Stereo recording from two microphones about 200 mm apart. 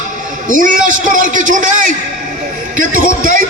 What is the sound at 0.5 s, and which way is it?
A man's voice, 40° right (ahead or behind).